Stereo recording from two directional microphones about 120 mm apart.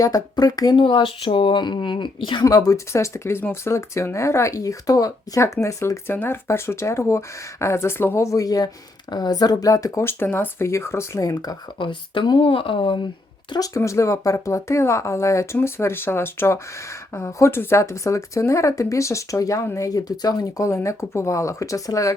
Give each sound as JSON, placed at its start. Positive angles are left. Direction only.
{"t": 0.0, "sound": "speech", "side_deg": 30}
{"t": 0.8, "sound": "speech", "side_deg": 45}
{"t": 13.5, "sound": "speech", "side_deg": 30}